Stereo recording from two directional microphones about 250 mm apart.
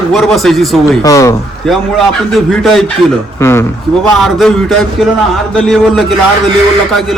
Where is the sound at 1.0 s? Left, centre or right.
Centre.